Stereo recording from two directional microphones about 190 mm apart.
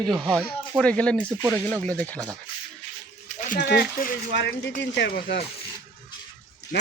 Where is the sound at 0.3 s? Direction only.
10° right (ahead or behind).